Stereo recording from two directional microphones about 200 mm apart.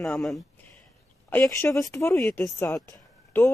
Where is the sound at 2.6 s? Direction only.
15° left (ahead or behind).